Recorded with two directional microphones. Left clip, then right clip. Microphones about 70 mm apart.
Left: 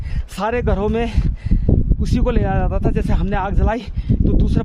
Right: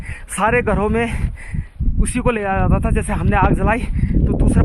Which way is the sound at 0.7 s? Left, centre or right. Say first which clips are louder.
Right 2 dB; left.